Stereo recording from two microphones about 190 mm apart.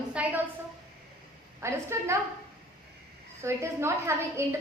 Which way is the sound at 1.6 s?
15° right (ahead or behind).